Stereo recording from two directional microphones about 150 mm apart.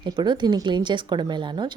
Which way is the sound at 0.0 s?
30° right (ahead or behind).